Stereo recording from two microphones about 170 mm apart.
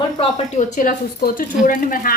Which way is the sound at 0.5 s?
50° left (ahead or behind).